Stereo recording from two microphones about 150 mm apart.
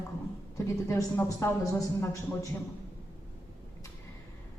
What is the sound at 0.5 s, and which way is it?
Speech, 20° left (ahead or behind).